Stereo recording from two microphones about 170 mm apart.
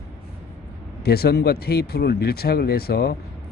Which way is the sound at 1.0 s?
65° left (ahead or behind).